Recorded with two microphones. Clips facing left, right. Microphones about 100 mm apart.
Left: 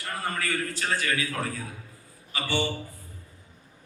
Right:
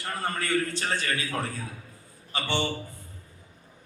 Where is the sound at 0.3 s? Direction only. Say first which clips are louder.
Right 3 dB; 30° right (ahead or behind).